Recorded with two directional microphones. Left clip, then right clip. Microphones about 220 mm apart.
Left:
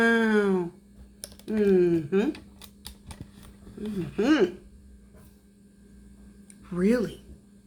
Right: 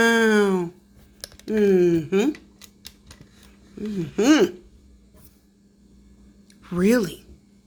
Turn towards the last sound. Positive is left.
turn(degrees=-45)  # may be behind; listen again after turning